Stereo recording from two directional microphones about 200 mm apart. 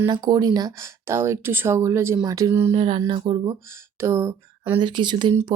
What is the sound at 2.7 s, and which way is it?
Speech, 30° right (ahead or behind).